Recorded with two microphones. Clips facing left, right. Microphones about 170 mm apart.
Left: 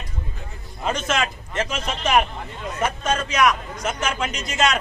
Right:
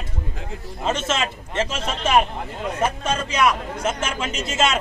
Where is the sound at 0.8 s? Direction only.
25° right (ahead or behind).